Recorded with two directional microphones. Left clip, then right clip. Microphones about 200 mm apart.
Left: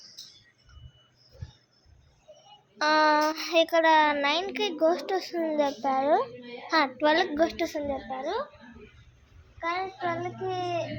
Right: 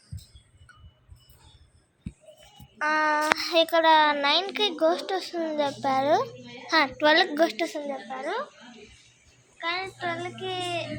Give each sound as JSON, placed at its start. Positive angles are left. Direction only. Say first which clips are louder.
{"t": 2.7, "sound": "a sound", "louder": "left 2 dB", "side_deg": 25}
{"t": 3.4, "sound": "a child's voice", "louder": "right 2 dB", "side_deg": 10}
{"t": 5.8, "sound": "a child's voice", "louder": "right 3 dB", "side_deg": 0}
{"t": 9.6, "sound": "a child's voice", "louder": "even", "side_deg": 5}